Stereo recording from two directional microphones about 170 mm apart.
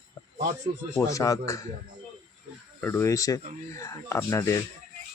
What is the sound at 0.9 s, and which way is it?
Speech, 20° left (ahead or behind).